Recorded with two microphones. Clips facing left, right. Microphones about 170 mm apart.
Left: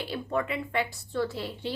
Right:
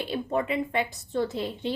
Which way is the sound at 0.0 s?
20° right (ahead or behind).